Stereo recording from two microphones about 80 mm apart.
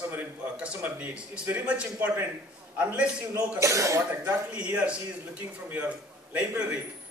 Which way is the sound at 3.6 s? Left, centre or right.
Right.